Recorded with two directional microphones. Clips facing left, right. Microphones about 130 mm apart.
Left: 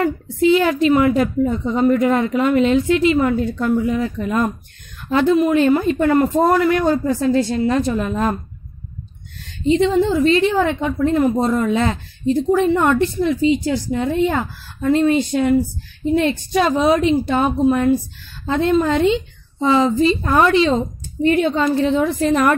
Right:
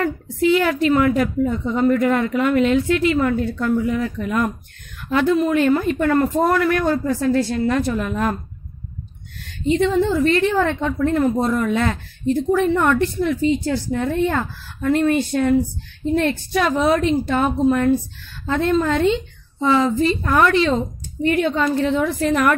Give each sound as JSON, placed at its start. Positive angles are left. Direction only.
{"t": 0.0, "sound": "a woman's voice", "side_deg": 25}
{"t": 9.7, "sound": "a woman's voice", "side_deg": 20}